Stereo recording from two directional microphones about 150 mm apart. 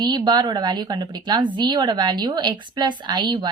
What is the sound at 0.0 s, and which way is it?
A woman's voice, 30° right (ahead or behind).